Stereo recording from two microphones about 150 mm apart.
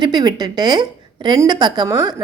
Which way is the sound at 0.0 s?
25° right (ahead or behind).